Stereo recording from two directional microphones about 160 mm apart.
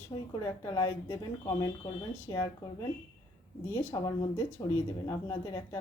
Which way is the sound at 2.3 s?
25° left (ahead or behind).